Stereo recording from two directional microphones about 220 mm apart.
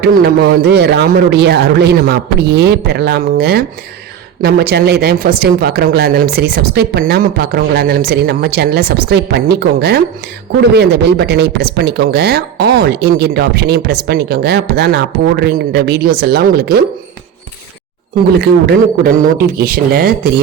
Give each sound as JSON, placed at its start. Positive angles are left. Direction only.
{"t": 0.0, "sound": "speech", "side_deg": -45}
{"t": 18.3, "sound": "speech", "side_deg": -45}